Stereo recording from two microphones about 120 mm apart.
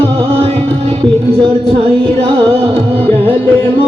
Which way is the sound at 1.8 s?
50° right (ahead or behind).